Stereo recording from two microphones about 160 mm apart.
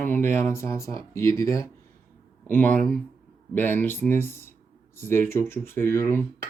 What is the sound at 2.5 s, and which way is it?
Speech, 10° left (ahead or behind).